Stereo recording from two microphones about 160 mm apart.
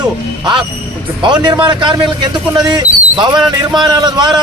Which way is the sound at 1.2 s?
25° right (ahead or behind).